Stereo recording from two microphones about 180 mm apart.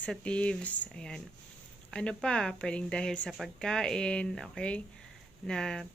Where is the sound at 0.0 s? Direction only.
5° left (ahead or behind).